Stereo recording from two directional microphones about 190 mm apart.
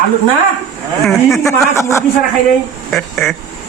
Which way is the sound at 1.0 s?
Centre (ahead or behind).